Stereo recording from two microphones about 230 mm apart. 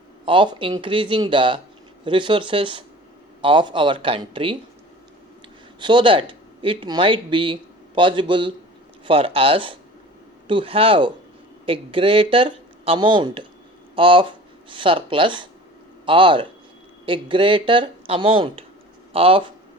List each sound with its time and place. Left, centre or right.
0.3 s speech: right
5.8 s speech: right